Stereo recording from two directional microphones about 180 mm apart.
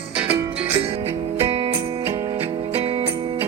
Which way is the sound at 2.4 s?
30° right (ahead or behind).